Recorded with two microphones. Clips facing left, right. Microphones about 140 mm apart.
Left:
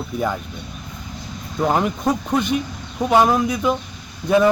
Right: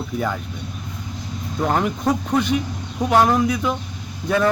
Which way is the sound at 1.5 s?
10° left (ahead or behind).